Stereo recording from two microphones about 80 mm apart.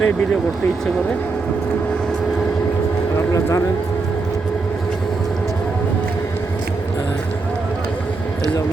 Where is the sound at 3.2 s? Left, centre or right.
Left.